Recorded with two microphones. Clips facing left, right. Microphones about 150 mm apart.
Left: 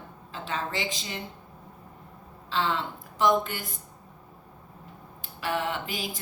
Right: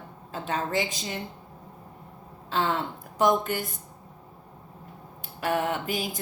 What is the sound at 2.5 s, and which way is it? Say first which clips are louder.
A woman's voice: right 2 dB; 50° right (ahead or behind).